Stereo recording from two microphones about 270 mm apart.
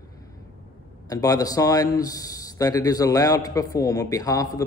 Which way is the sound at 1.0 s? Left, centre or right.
Centre.